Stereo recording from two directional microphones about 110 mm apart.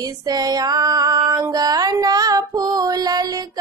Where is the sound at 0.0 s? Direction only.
35° right (ahead or behind).